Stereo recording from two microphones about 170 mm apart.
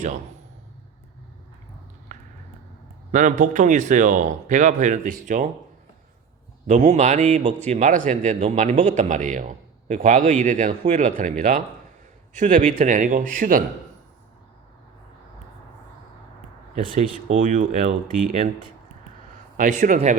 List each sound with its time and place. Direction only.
2.1 s a sound: 45° right (ahead or behind)
3.1 s a man's voice: 45° right (ahead or behind)
6.7 s a man's voice: 45° right (ahead or behind)
17.0 s a man's voice: 45° right (ahead or behind)
19.5 s a man's voice: 50° right (ahead or behind)